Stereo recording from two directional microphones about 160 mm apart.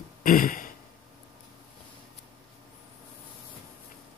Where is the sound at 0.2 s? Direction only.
60° left (ahead or behind).